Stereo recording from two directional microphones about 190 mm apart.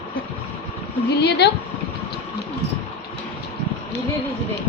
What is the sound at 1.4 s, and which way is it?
Speech, 60° left (ahead or behind).